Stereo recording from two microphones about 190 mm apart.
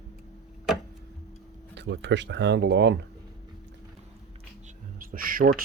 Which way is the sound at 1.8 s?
65° right (ahead or behind).